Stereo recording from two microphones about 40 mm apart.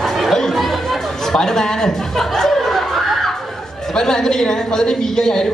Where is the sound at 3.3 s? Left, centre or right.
Centre.